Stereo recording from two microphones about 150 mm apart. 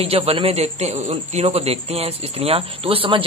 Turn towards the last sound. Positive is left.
turn(degrees=-35)  # may be behind; listen again after turning